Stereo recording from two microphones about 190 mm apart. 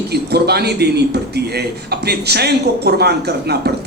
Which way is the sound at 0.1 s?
60° right (ahead or behind).